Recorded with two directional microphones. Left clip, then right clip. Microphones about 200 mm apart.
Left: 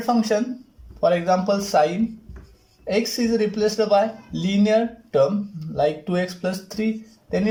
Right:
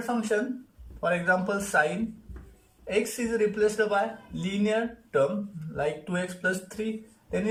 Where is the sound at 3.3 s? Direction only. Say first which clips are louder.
Left 3 dB; 25° left (ahead or behind).